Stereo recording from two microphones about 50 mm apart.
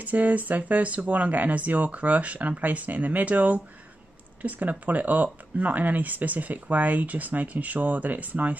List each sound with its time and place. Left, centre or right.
0.0 s speech: right